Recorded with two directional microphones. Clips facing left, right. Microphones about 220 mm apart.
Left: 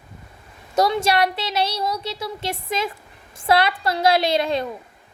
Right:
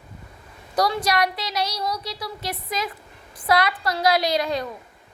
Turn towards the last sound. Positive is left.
turn(degrees=25)  # may be behind; listen again after turning